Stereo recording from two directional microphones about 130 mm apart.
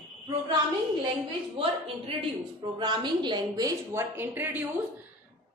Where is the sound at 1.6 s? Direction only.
40° right (ahead or behind).